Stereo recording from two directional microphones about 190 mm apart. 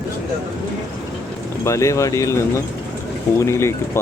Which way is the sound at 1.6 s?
15° left (ahead or behind).